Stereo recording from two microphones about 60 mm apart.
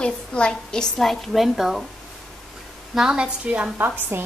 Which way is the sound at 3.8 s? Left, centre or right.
Right.